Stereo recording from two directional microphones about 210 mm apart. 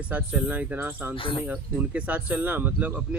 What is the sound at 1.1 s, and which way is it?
Speech, 25° left (ahead or behind).